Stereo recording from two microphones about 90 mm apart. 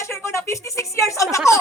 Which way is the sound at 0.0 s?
30° left (ahead or behind).